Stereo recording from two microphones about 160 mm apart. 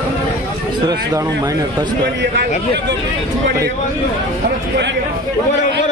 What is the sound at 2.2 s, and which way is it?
Speech, 90° right.